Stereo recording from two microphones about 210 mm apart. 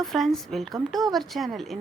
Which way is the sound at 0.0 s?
Centre (ahead or behind).